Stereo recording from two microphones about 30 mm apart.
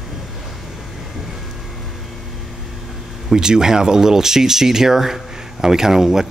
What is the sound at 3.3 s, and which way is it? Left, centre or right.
Speech, right.